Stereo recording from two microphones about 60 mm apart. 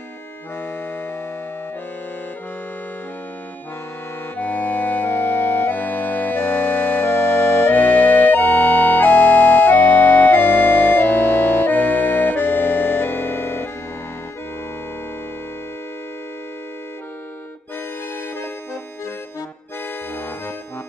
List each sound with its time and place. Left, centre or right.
4.4 s accordion: left